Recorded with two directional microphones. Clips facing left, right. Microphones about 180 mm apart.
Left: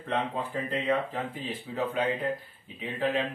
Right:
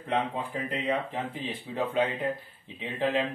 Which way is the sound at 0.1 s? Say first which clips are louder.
Right 1 dB; 10° right (ahead or behind).